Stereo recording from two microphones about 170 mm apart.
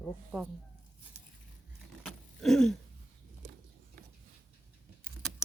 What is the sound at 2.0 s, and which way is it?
Vehicle, 5° left (ahead or behind).